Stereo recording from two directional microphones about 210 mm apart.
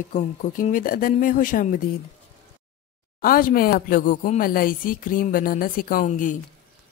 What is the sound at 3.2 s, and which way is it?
Speech, 40° left (ahead or behind).